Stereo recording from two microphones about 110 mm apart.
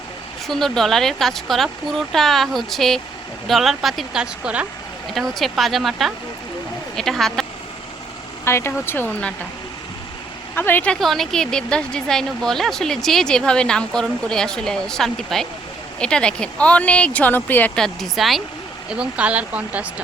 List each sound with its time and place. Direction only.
0.4 s a woman's voice: 5° left (ahead or behind)
8.4 s speech: 25° left (ahead or behind)
10.5 s speech: 20° left (ahead or behind)
11.0 s a woman's voice: centre (ahead or behind)
17.7 s a woman's voice: 5° left (ahead or behind); by 19.9 s 10° right (ahead or behind)